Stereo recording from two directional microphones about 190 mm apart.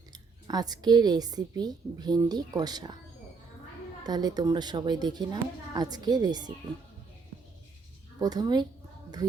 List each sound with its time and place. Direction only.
0.4 s speech: 20° right (ahead or behind)
4.0 s speech: 20° right (ahead or behind)
8.2 s speech: 20° right (ahead or behind)